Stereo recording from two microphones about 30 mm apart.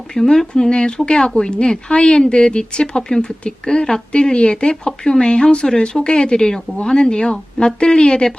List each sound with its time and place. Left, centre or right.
0.1 s speech: centre